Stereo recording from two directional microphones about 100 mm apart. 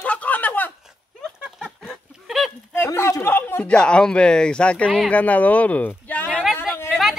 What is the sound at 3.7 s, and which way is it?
Speech, 10° left (ahead or behind).